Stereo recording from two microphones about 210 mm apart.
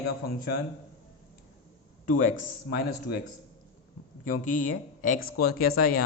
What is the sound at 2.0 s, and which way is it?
Speech, 40° left (ahead or behind).